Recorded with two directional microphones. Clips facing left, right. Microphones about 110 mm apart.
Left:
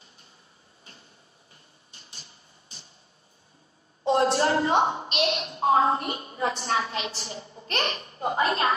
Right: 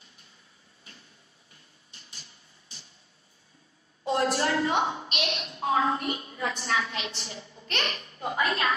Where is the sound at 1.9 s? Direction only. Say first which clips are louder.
Left 1 dB; 30° left (ahead or behind).